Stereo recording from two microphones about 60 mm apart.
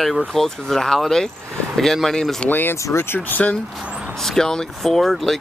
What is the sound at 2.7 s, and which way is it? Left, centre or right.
Speech, left.